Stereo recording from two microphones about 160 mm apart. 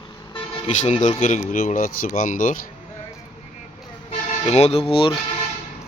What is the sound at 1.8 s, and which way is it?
Speech, 60° left (ahead or behind).